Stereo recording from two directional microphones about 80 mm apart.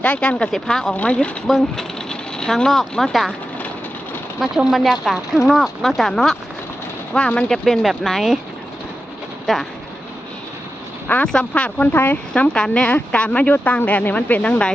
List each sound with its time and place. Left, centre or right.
0.0 s speech: centre
0.9 s speech: centre
1.5 s speech: centre
2.0 s speech: centre
4.4 s speech: centre
7.1 s speech: centre
9.5 s speech: centre
11.3 s speech: centre
12.3 s speech: centre